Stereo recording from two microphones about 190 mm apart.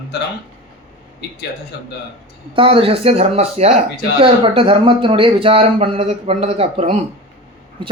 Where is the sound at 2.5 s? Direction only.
30° right (ahead or behind).